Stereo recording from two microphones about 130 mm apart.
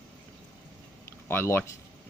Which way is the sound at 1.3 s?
20° left (ahead or behind).